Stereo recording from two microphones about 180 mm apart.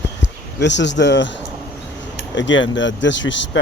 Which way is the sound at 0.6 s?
80° left.